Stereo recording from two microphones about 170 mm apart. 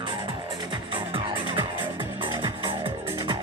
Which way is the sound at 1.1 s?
30° right (ahead or behind).